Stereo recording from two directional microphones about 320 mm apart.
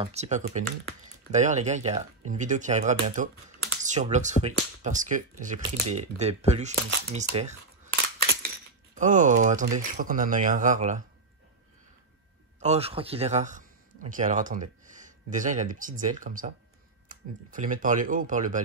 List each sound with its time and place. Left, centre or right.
0.0 s speech: right
12.5 s a man's voice: centre